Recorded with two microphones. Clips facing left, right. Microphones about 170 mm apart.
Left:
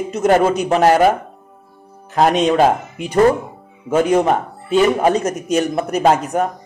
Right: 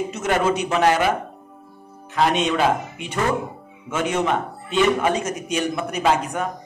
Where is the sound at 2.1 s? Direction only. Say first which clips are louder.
Left 6 dB; 40° left (ahead or behind).